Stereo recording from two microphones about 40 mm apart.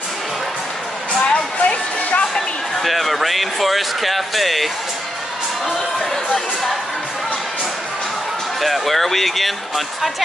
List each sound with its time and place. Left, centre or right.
1.2 s a sound: left
2.8 s speech: centre
6.3 s speech: centre
8.5 s speech: centre